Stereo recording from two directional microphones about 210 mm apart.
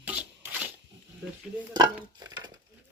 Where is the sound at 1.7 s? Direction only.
20° right (ahead or behind).